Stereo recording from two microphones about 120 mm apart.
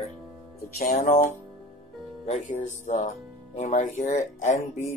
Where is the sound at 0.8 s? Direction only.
90° left.